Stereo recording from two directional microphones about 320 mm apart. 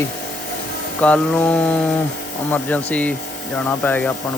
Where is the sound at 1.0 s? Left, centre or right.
Centre.